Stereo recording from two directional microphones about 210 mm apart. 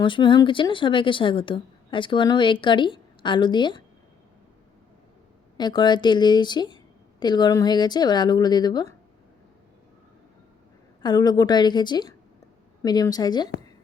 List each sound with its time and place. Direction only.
0.0 s a woman's voice: 20° left (ahead or behind)
5.5 s a woman's voice: 20° left (ahead or behind)
11.0 s a woman's voice: 20° left (ahead or behind)